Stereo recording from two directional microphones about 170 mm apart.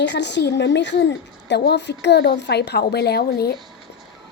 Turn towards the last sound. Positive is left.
turn(degrees=70)  # may be behind; listen again after turning